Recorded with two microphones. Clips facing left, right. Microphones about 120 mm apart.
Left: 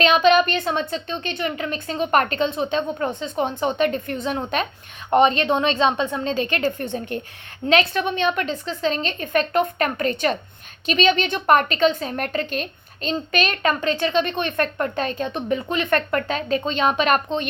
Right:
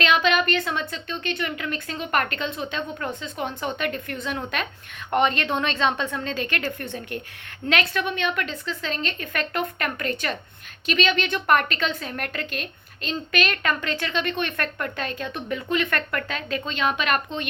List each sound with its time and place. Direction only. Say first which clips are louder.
0.0 s a woman's voice: left 5 dB; 20° left (ahead or behind)